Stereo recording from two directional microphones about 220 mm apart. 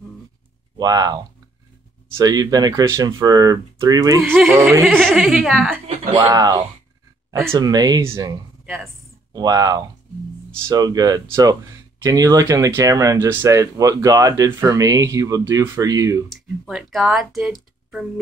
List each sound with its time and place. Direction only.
0.7 s speech: 20° right (ahead or behind); by 5.8 s centre (ahead or behind)
6.1 s speech: 15° right (ahead or behind)
16.3 s speech: centre (ahead or behind)